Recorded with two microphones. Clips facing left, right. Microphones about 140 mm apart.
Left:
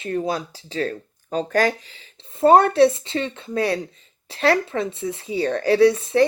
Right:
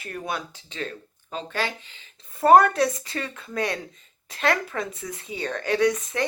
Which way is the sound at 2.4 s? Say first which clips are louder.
Left 3 dB; 25° left (ahead or behind).